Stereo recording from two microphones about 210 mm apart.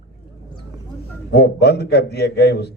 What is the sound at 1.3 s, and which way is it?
A man's voice, 50° left (ahead or behind).